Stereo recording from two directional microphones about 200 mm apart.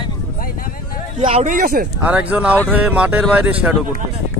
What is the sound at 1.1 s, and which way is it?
Speech, 35° right (ahead or behind).